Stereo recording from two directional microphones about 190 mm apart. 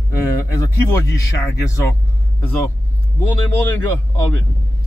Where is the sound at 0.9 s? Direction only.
15° left (ahead or behind).